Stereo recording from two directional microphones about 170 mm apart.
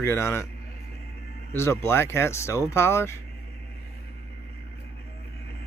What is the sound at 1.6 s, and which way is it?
Speech, 15° left (ahead or behind).